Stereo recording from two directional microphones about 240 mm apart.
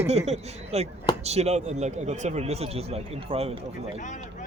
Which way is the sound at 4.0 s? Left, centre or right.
Left.